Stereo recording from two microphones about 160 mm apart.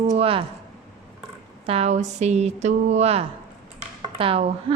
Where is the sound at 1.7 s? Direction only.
40° right (ahead or behind).